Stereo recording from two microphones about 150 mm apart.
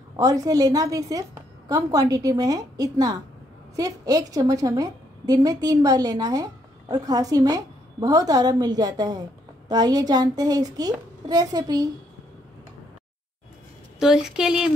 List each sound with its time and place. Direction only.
0.1 s a woman's voice: 25° right (ahead or behind)
13.9 s a woman's voice: 5° right (ahead or behind)